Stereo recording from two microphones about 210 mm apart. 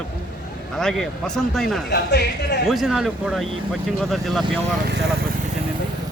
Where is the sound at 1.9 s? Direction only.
50° left (ahead or behind).